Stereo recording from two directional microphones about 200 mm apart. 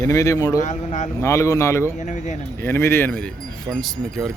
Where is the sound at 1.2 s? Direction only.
15° left (ahead or behind).